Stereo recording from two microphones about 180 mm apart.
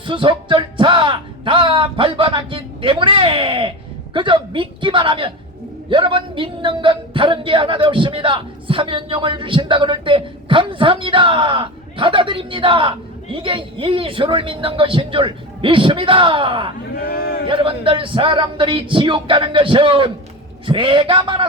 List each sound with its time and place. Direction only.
0.0 s a man's voice: 30° right (ahead or behind)
16.9 s speech: 55° left (ahead or behind)
17.4 s a man's voice: 30° right (ahead or behind)